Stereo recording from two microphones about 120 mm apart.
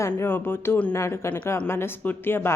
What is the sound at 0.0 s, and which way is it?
A woman's voice, 20° left (ahead or behind).